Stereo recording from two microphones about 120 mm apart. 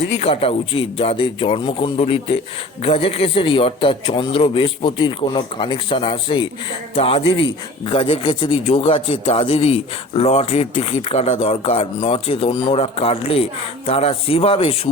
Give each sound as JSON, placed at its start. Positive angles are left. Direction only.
{"t": 0.2, "sound": "a man's voice", "side_deg": 55}